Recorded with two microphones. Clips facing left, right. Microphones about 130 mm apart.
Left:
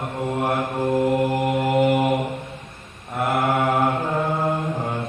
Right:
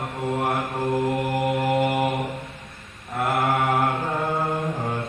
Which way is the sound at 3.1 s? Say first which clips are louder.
Left 2 dB; centre (ahead or behind).